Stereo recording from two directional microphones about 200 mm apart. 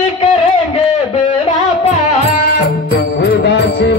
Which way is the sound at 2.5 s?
55° left (ahead or behind).